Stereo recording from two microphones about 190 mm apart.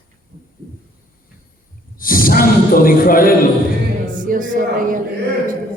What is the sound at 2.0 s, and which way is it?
Snort, 50° left (ahead or behind).